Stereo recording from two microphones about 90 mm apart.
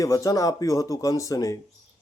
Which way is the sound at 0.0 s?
40° left (ahead or behind).